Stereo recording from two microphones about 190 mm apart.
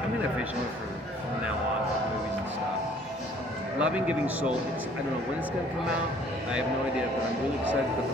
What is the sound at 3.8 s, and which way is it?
Speech, 5° right (ahead or behind).